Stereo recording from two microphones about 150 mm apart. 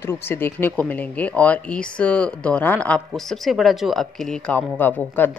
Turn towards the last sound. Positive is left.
turn(degrees=10)  # may be behind; listen again after turning